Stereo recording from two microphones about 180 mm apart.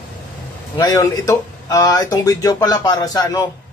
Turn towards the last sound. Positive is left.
turn(degrees=20)  # may be behind; listen again after turning